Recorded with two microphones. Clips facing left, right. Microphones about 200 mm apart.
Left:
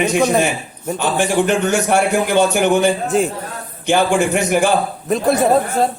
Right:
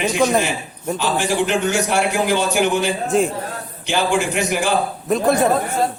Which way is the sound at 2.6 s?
50° left (ahead or behind).